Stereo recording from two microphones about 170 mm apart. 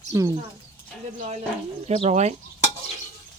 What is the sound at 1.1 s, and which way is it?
Speech, 40° right (ahead or behind).